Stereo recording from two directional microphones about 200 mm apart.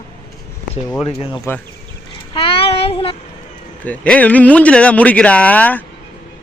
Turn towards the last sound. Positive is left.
turn(degrees=5)  # may be behind; listen again after turning